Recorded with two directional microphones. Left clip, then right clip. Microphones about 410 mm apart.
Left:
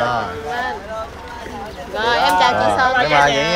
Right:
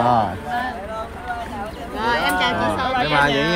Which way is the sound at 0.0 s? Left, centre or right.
Centre.